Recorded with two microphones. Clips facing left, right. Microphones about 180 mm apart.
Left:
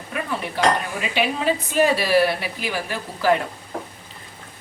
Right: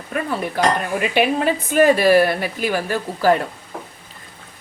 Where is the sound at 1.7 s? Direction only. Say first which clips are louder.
Right 6 dB; 50° right (ahead or behind).